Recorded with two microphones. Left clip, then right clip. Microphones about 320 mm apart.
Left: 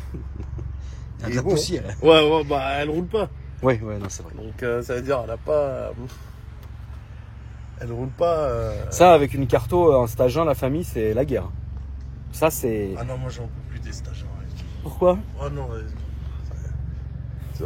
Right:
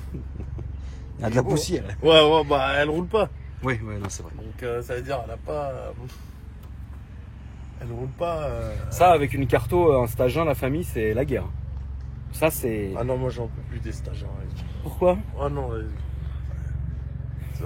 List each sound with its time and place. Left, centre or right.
1.2 s speech: centre
4.6 s speech: left
7.8 s speech: left
9.2 s speech: centre
12.9 s speech: centre
13.8 s a sound: centre
14.9 s speech: centre
15.3 s speech: centre